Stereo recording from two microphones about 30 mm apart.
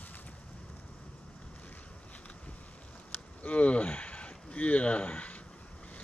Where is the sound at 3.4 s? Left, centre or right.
Left.